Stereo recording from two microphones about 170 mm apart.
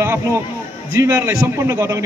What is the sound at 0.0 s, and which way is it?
A man's voice, 15° right (ahead or behind).